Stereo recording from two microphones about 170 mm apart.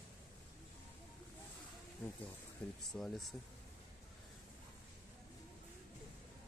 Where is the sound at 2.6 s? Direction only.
5° left (ahead or behind).